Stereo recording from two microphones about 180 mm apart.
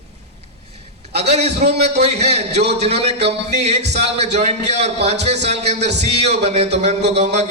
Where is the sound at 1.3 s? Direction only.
35° right (ahead or behind).